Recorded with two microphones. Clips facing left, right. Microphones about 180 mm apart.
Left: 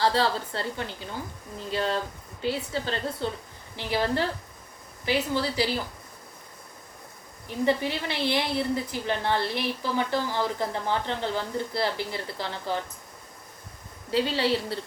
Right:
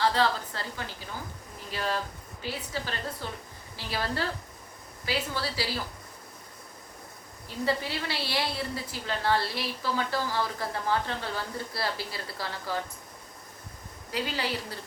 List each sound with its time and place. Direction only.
0.0 s a woman's voice: 30° left (ahead or behind)
7.4 s a woman's voice: 20° left (ahead or behind)
14.1 s a woman's voice: 30° left (ahead or behind)